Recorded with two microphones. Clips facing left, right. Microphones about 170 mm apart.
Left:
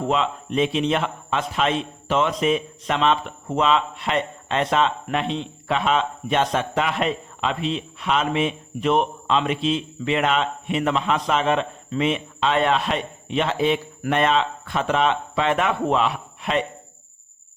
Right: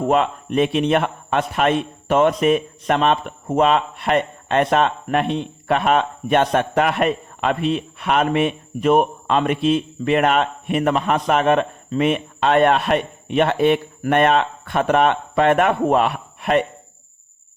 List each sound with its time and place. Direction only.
0.1 s a man's voice: 55° right (ahead or behind)